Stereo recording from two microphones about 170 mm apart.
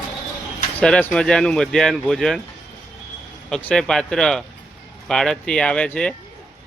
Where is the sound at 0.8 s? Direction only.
5° left (ahead or behind).